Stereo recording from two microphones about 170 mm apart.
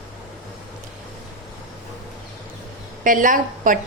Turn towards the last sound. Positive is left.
turn(degrees=-50)  # may be behind; listen again after turning